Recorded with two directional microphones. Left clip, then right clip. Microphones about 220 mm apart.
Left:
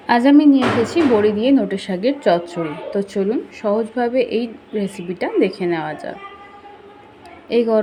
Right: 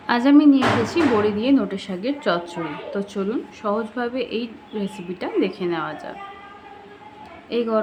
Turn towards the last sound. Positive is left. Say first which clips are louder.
# left 6 dB
turn(degrees=15)  # may be behind; listen again after turning